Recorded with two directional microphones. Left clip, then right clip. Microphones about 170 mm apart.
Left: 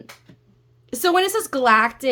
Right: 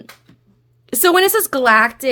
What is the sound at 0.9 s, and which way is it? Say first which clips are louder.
A woman's voice: right 5 dB; 50° right (ahead or behind).